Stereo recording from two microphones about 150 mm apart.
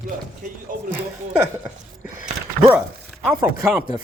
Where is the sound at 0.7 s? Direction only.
60° right (ahead or behind).